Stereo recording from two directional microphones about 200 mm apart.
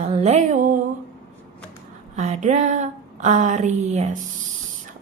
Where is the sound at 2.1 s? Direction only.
35° right (ahead or behind).